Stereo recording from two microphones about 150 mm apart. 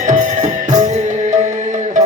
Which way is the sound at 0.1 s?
55° right (ahead or behind).